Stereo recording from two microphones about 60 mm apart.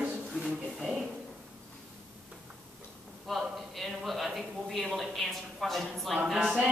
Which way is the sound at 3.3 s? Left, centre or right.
Centre.